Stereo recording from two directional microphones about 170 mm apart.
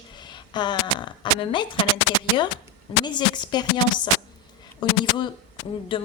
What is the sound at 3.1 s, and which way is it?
Speech, 25° left (ahead or behind).